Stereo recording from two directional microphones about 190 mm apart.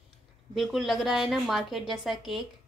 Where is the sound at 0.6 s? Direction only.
Centre (ahead or behind).